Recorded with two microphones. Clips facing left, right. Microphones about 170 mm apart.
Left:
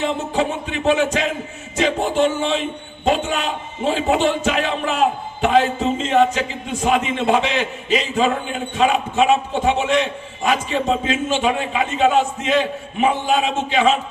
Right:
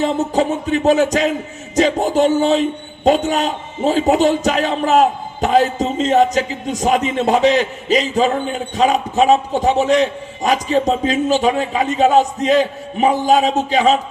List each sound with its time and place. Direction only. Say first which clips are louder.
0.0 s speech: right 4 dB; 40° right (ahead or behind)